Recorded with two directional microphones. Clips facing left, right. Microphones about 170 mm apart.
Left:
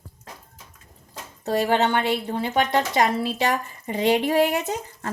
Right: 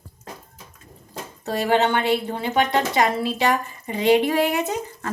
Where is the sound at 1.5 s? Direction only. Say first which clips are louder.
Right 1 dB; 40° left (ahead or behind).